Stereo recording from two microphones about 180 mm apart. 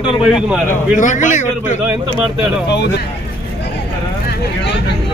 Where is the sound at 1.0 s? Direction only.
45° left (ahead or behind).